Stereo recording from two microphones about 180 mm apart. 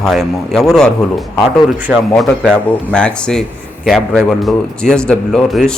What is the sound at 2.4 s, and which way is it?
Speech, 5° left (ahead or behind).